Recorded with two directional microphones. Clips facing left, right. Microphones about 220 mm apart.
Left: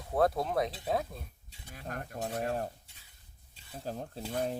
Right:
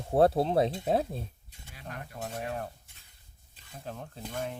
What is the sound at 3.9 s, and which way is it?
Stir, 35° left (ahead or behind).